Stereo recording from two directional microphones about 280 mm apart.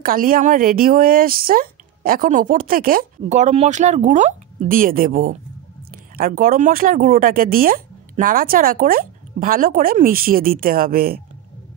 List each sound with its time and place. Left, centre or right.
0.0 s speech: right